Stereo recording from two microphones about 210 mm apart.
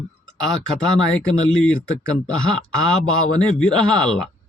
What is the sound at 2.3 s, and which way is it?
Speech, 70° left (ahead or behind).